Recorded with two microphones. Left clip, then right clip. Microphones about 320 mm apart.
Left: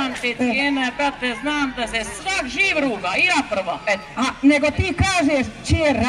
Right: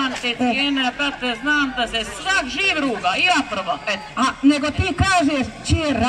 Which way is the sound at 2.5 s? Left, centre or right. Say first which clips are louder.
Left 1 dB; centre.